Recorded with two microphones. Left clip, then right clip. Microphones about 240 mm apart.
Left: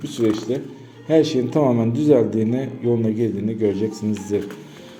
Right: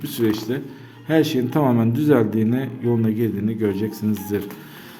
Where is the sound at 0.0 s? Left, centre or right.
Right.